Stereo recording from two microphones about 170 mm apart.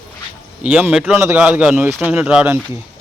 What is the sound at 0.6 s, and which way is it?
Speech, 10° right (ahead or behind).